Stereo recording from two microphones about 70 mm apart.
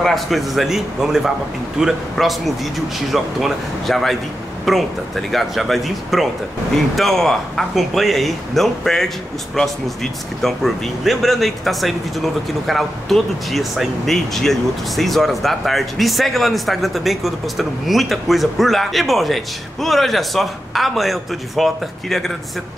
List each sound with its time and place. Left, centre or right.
0.0 s a man's voice: centre